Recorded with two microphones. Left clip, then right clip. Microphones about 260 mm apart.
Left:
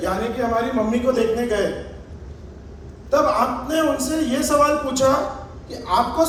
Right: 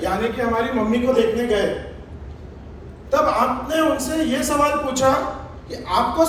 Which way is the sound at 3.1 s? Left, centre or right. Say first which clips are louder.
Even; left.